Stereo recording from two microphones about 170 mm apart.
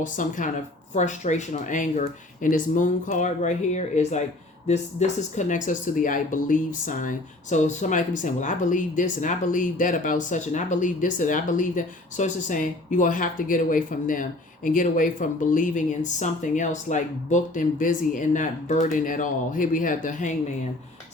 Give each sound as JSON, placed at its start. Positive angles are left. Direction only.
{"t": 0.0, "sound": "speech", "side_deg": 50}